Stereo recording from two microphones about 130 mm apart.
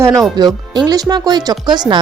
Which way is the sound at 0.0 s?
25° right (ahead or behind).